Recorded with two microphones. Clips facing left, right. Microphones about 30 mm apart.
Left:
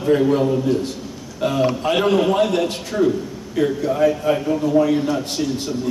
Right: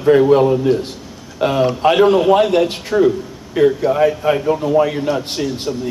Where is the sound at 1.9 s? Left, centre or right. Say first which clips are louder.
Right 6 dB; centre.